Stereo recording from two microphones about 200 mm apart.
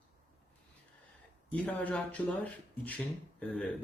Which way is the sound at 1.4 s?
5° left (ahead or behind).